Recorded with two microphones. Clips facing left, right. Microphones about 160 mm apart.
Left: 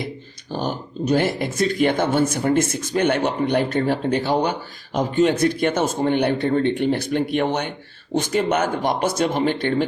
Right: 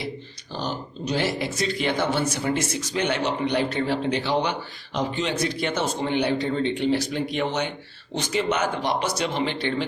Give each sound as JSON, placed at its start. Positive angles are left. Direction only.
{"t": 0.5, "sound": "speech", "side_deg": 50}